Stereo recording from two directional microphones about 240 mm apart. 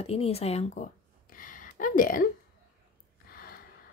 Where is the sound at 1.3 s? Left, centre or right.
Left.